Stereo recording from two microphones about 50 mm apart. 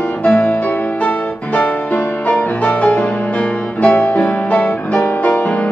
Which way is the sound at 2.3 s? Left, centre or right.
Left.